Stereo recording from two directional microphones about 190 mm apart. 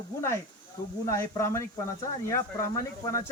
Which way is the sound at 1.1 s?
15° left (ahead or behind).